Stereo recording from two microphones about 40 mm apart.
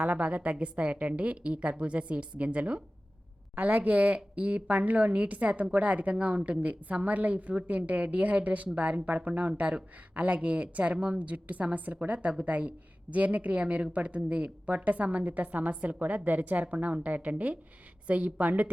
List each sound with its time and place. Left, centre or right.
0.0 s a woman's voice: right
3.5 s a woman's voice: right